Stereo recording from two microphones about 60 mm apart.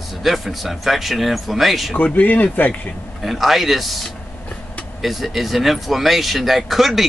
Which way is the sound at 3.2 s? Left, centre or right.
Centre.